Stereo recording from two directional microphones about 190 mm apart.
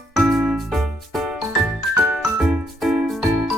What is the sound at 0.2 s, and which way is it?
Music, 5° right (ahead or behind).